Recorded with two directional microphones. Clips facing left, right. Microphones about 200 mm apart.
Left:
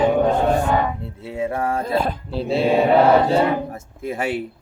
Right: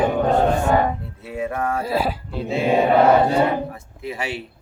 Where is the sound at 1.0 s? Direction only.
25° left (ahead or behind).